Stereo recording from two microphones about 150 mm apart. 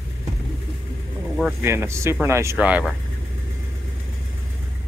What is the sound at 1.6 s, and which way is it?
Speech, 15° right (ahead or behind).